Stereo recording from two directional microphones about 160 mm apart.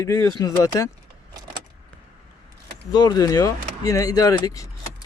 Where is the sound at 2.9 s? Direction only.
25° left (ahead or behind).